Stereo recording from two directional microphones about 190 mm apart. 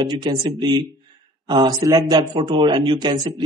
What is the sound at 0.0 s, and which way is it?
Speech, 20° right (ahead or behind).